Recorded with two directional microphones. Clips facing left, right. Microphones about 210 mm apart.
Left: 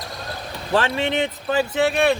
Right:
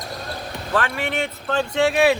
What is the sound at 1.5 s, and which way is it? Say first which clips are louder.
Speech: right 1 dB; centre (ahead or behind).